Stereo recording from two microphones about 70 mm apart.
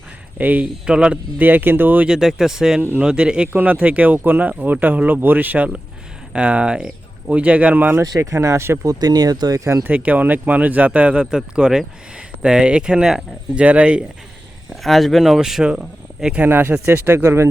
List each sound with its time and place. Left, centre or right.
0.3 s speech: right
0.9 s speech: centre
1.4 s speech: right
2.0 s speech: centre; by 8.0 s right
8.2 s speech: right
8.9 s speech: right
9.8 s speech: right
13.6 s speech: centre
14.7 s speech: centre
16.4 s speech: right